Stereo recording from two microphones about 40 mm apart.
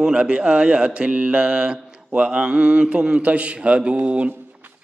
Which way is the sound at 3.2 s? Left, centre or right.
Right.